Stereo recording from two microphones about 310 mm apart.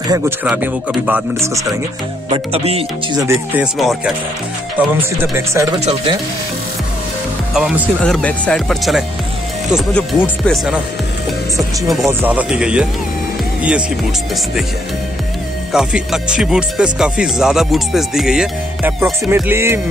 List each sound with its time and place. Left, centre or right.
0.1 s speech: centre
3.3 s speech: centre
5.3 s speech: centre
7.5 s speech: centre
15.7 s speech: centre